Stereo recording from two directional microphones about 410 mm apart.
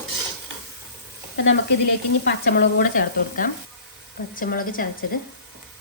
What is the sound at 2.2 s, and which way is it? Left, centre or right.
A woman's voice, left.